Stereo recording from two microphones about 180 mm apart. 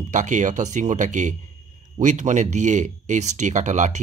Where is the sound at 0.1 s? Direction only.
40° right (ahead or behind).